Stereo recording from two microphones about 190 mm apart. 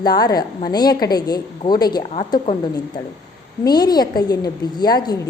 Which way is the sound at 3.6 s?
20° left (ahead or behind).